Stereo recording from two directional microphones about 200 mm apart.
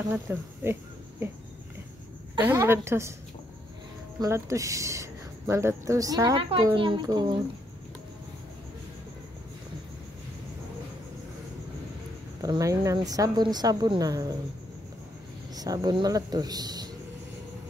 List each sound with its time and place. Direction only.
0.1 s speech: 10° right (ahead or behind)
2.4 s speech: 10° right (ahead or behind)
4.2 s speech: 15° right (ahead or behind)
12.4 s speech: 15° right (ahead or behind)
15.5 s speech: 20° right (ahead or behind)